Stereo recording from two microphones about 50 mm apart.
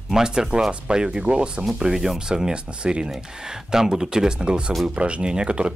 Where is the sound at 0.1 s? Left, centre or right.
Centre.